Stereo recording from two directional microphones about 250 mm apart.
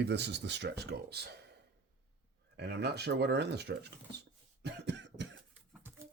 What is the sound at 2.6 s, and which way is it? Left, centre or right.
Speech, right.